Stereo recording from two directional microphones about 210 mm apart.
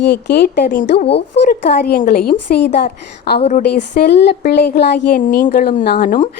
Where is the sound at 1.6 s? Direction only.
50° left (ahead or behind).